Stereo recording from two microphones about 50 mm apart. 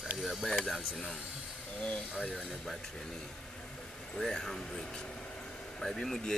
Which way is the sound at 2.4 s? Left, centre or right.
Centre.